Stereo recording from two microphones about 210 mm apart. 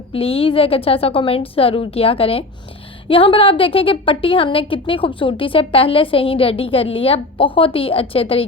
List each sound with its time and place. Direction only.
0.1 s a woman's voice: 25° left (ahead or behind)